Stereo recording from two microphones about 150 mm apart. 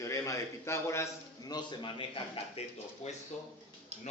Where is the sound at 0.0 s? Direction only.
20° left (ahead or behind).